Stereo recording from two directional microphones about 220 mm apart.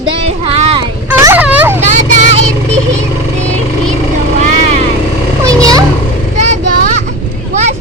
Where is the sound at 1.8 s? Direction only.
30° right (ahead or behind).